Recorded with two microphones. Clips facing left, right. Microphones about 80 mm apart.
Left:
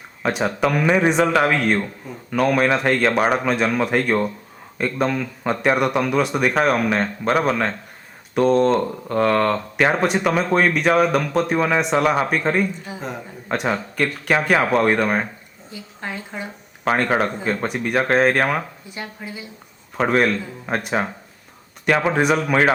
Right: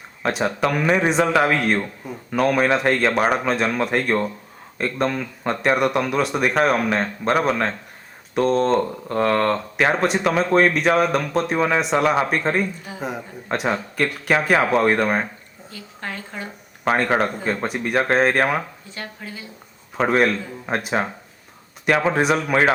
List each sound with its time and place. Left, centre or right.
0.2 s speech: centre
15.7 s speech: centre
16.8 s speech: centre
18.9 s speech: centre
20.0 s speech: centre